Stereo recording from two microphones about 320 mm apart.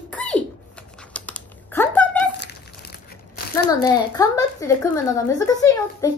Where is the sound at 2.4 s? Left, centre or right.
Left.